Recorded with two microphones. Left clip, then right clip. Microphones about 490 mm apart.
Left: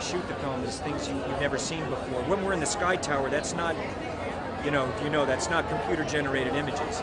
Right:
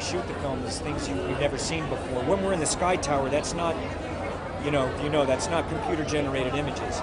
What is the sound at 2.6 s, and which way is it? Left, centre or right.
Speech, right.